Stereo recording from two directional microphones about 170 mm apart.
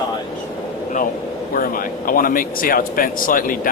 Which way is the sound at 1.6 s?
55° left (ahead or behind).